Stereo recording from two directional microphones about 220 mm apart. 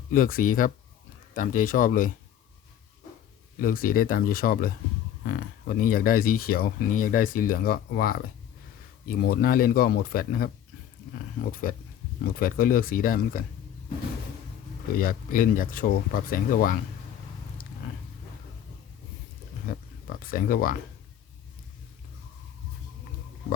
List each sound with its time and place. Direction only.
0.1 s speech: 40° left (ahead or behind)
3.6 s speech: 40° left (ahead or behind)
14.9 s speech: 40° left (ahead or behind)
19.7 s a sound: 40° left (ahead or behind)
20.1 s speech: 40° left (ahead or behind)